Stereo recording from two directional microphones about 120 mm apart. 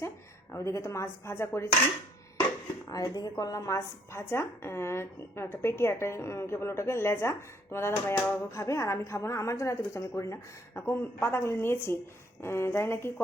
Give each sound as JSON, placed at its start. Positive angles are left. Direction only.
{"t": 0.5, "sound": "a woman's voice", "side_deg": 25}
{"t": 2.9, "sound": "a woman's voice", "side_deg": 30}